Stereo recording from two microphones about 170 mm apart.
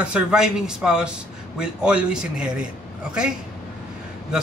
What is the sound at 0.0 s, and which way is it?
A man's voice, 5° right (ahead or behind).